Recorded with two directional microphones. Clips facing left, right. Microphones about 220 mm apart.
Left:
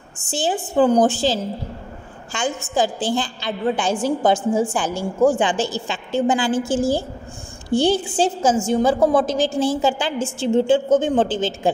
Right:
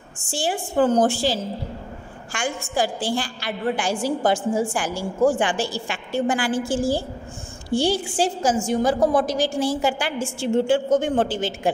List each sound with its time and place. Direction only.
0.3 s a woman's voice: 20° left (ahead or behind)